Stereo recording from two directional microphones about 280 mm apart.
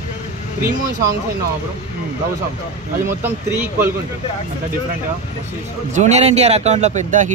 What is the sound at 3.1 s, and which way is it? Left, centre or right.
Speech, centre.